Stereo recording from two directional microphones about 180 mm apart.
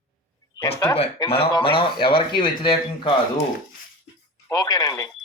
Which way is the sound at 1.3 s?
30° left (ahead or behind).